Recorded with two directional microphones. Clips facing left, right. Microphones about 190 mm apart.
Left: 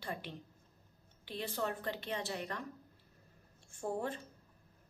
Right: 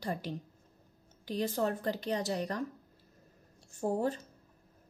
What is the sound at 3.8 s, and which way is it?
Speech, 40° right (ahead or behind).